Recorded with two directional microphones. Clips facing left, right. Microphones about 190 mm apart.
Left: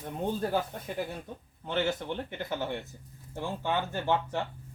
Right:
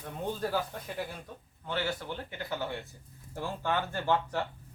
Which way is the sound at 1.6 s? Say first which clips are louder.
Left 4 dB; 20° left (ahead or behind).